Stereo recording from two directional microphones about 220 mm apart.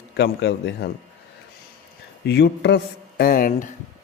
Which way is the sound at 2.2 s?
50° left (ahead or behind).